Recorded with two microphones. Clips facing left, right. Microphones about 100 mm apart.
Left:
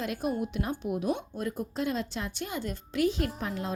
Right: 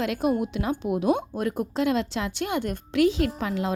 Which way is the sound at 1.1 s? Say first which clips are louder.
Right 7 dB; 65° right (ahead or behind).